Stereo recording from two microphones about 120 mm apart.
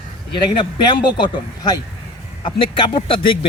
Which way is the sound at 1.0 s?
40° left (ahead or behind).